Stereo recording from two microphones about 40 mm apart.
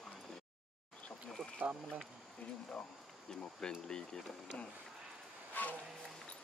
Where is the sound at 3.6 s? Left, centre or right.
Centre.